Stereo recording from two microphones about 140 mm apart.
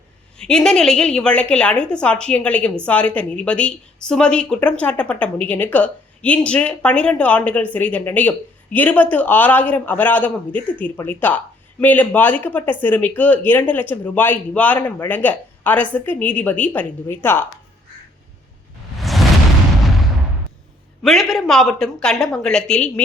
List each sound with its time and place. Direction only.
0.3 s a woman's voice: 5° left (ahead or behind)
18.9 s a sound: centre (ahead or behind)
21.0 s speech: centre (ahead or behind)